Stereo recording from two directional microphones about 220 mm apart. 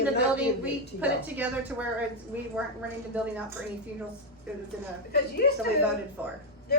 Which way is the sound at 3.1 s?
5° right (ahead or behind).